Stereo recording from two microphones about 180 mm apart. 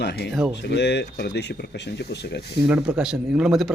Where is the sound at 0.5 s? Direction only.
70° left (ahead or behind).